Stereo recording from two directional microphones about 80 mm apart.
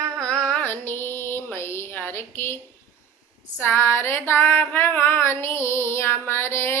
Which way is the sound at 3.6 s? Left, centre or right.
Left.